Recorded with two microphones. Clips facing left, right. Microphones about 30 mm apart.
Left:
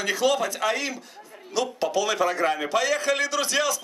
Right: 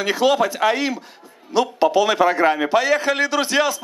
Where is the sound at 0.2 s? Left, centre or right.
Right.